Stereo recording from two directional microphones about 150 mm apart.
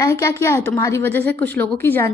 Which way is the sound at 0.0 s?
20° left (ahead or behind).